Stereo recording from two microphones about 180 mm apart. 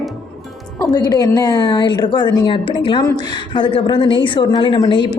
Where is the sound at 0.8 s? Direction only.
20° left (ahead or behind).